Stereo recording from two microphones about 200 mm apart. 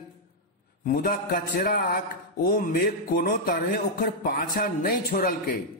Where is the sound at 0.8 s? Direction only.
45° left (ahead or behind).